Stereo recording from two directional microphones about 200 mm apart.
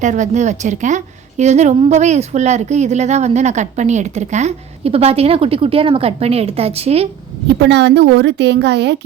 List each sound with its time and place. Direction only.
0.0 s a woman's voice: 35° right (ahead or behind)
7.6 s a woman's voice: 60° right (ahead or behind)